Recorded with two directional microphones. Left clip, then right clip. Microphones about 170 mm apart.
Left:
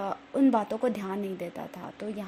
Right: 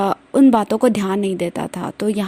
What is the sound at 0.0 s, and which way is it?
A woman's voice, 45° right (ahead or behind).